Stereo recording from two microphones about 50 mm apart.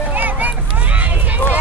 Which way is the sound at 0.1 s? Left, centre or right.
Right.